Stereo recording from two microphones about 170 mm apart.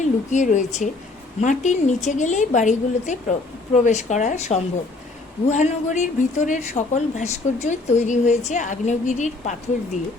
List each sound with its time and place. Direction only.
0.0 s a woman's voice: 45° left (ahead or behind)